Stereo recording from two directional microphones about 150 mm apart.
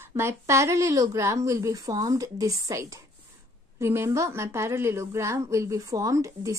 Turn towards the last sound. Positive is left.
turn(degrees=-20)  # may be behind; listen again after turning